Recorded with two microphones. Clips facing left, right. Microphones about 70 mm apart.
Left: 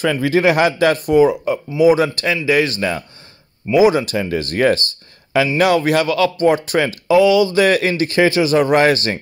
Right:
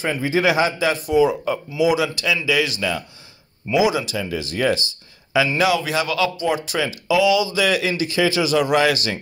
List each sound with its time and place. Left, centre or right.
0.0 s a man's voice: left
6.0 s speech: left